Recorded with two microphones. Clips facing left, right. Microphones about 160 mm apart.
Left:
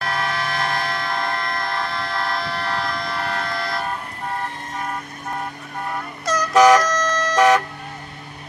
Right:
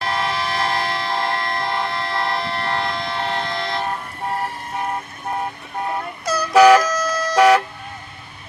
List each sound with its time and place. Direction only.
0.0 s vehicle: 25° right (ahead or behind)
6.2 s vehicle: 10° right (ahead or behind)